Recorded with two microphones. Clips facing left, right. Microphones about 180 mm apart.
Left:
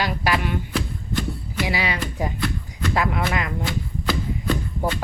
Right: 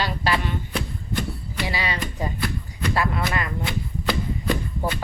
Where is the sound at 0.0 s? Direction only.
10° left (ahead or behind).